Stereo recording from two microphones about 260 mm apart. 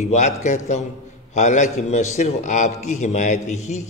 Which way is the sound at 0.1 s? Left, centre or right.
Left.